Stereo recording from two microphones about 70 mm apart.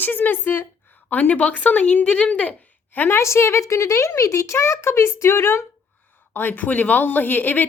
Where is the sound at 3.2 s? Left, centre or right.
Left.